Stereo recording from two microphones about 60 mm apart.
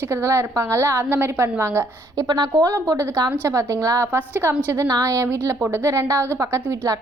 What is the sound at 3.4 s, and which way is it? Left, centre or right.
Speech, right.